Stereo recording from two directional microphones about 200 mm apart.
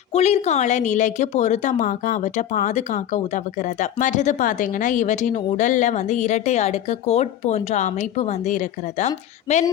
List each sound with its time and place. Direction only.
0.1 s speech: 35° left (ahead or behind)